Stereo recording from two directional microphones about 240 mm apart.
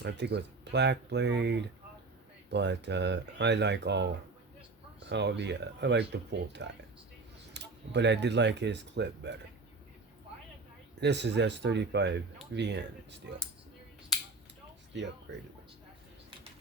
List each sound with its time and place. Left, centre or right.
0.0 s speech: right
11.0 s speech: right